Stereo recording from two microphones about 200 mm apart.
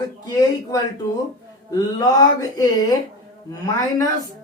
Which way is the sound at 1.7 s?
20° left (ahead or behind).